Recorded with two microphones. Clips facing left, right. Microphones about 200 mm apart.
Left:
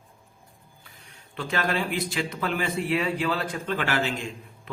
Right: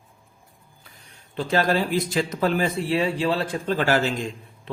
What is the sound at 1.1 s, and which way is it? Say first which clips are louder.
A man's voice: right 6 dB; 35° right (ahead or behind).